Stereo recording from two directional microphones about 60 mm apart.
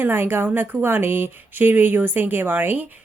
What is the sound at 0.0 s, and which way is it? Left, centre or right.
Speech, right.